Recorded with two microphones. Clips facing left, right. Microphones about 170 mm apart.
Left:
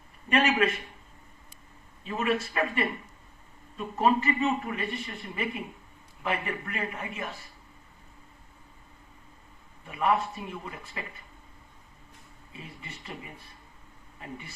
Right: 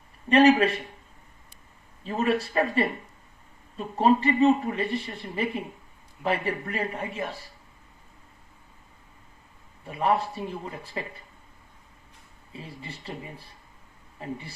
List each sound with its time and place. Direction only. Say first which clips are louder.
0.3 s speech: right 7 dB; 35° right (ahead or behind)
2.0 s speech: right 3 dB; 35° right (ahead or behind)
9.8 s speech: right 2 dB; 30° right (ahead or behind)
12.5 s speech: right 4 dB; 30° right (ahead or behind)